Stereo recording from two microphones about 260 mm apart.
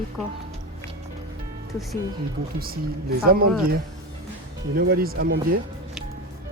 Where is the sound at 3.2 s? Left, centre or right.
Right.